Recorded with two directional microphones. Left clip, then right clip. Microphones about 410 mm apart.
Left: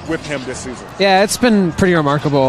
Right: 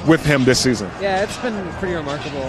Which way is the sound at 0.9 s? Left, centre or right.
Left.